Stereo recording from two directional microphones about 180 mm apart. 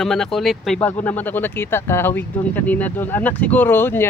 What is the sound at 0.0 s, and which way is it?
Speech, centre (ahead or behind).